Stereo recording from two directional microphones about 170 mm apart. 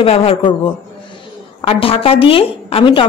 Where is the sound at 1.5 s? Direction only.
30° left (ahead or behind).